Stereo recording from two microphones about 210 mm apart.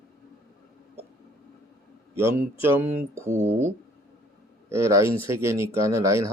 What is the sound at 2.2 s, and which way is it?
Speech, 10° right (ahead or behind).